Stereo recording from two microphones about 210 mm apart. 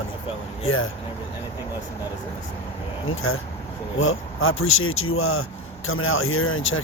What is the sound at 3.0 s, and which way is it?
Speech, 80° left.